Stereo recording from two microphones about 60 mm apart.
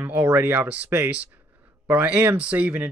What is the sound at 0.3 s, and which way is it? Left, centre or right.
Speech, right.